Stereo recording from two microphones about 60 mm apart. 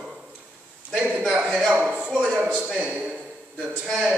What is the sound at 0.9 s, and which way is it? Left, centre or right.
Speech, centre.